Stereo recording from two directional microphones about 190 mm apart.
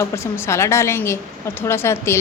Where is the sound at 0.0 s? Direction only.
15° left (ahead or behind).